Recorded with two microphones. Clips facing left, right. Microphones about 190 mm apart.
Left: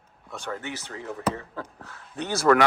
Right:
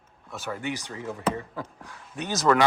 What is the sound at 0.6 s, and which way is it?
Speech, 15° right (ahead or behind).